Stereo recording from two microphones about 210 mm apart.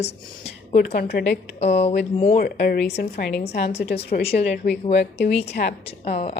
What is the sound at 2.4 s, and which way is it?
Speech, 45° left (ahead or behind).